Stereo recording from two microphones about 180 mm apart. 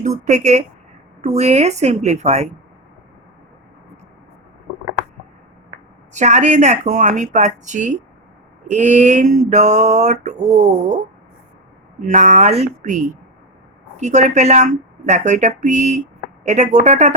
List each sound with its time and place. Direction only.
0.0 s speech: 40° right (ahead or behind)
6.1 s speech: 40° right (ahead or behind)